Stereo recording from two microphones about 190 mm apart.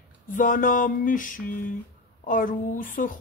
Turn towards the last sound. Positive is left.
turn(degrees=45)  # may be behind; listen again after turning